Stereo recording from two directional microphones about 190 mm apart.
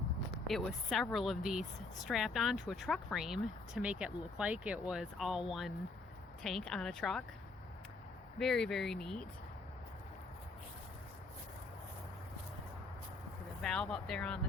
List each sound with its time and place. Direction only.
0.4 s speech: centre (ahead or behind)
8.4 s speech: 5° left (ahead or behind)
13.6 s speech: 5° left (ahead or behind)